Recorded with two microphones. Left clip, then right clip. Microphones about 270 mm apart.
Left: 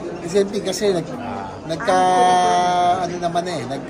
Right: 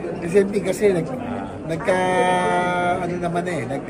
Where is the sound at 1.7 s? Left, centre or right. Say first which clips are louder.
Left 4 dB; left.